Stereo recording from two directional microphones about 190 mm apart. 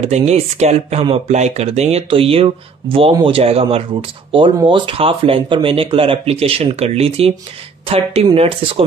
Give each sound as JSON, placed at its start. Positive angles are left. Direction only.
{"t": 0.0, "sound": "speech", "side_deg": -35}